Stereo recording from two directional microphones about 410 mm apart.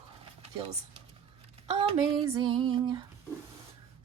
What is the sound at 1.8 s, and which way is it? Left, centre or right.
Speech, centre.